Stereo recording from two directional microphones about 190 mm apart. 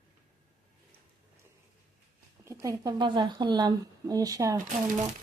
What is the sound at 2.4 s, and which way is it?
Speech, 15° right (ahead or behind).